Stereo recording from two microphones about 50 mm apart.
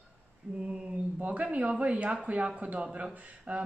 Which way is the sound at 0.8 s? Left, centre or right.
Right.